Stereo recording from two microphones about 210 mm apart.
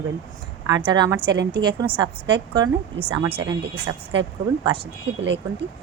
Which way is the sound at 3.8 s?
60° right (ahead or behind).